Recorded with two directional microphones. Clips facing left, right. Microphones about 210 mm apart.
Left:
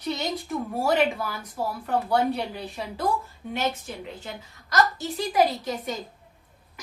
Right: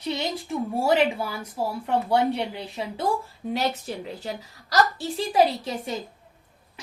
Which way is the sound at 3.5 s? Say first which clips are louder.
Right 2 dB; 35° right (ahead or behind).